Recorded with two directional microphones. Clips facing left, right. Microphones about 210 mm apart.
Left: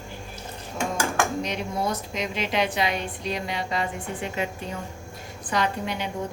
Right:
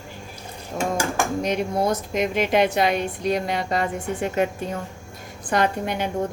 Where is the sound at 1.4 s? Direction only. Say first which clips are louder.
Right 5 dB; 50° right (ahead or behind).